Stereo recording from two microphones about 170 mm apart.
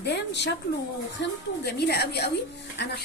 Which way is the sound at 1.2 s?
75° left (ahead or behind).